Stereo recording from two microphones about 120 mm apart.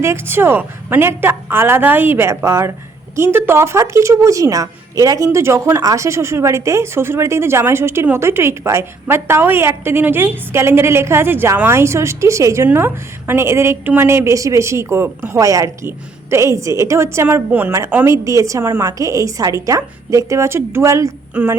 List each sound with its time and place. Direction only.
0.0 s a woman's voice: 20° right (ahead or behind)
21.4 s a woman's voice: 15° right (ahead or behind)